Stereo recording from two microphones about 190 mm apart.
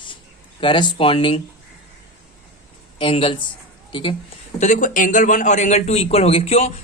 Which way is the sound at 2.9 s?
30° left (ahead or behind).